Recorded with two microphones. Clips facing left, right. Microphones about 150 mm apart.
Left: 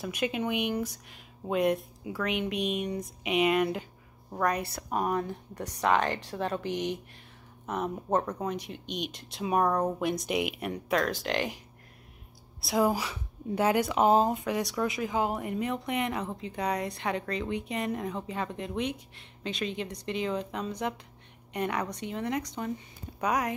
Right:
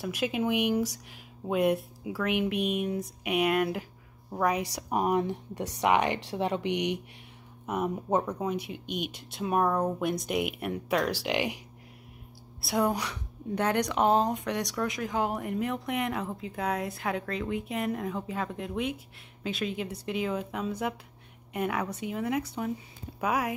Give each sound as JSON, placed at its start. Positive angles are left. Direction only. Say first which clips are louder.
{"t": 0.0, "sound": "speech", "louder": "right 1 dB", "side_deg": 0}
{"t": 4.7, "sound": "speech", "louder": "right 3 dB", "side_deg": -20}
{"t": 8.8, "sound": "speech", "louder": "right 1 dB", "side_deg": -55}
{"t": 9.3, "sound": "speech", "louder": "even", "side_deg": 0}
{"t": 12.6, "sound": "speech", "louder": "left 1 dB", "side_deg": 0}